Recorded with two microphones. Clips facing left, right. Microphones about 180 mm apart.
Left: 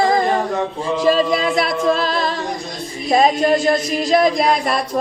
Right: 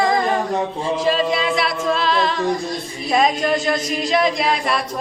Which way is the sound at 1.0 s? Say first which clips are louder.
Left 4 dB; 45° left (ahead or behind).